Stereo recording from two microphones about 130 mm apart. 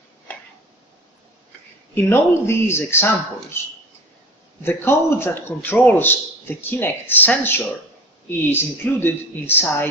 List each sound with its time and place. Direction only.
0.3 s a sound: 10° left (ahead or behind)
2.0 s speech: 20° left (ahead or behind)
4.6 s a man's voice: 15° left (ahead or behind)